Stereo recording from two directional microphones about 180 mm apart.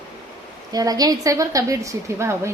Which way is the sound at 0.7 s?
20° right (ahead or behind).